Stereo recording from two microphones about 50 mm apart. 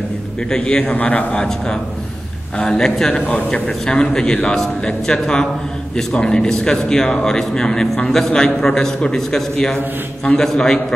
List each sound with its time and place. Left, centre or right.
0.5 s a man's voice: centre
2.5 s a man's voice: centre
3.2 s a man's voice: left
3.8 s a man's voice: centre